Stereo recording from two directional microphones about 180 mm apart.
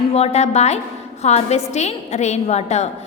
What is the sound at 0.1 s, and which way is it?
A woman's voice, 35° left (ahead or behind).